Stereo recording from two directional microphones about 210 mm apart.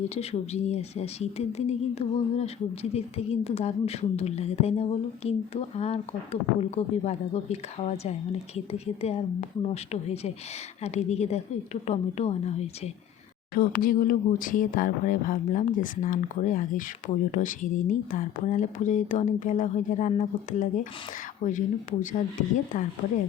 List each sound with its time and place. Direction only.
0.1 s a woman's voice: 30° left (ahead or behind)
13.5 s speech: 45° left (ahead or behind)